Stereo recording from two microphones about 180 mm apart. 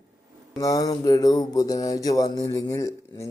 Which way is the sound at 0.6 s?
20° left (ahead or behind).